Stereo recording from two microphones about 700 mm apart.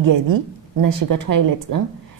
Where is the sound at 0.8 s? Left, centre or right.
Right.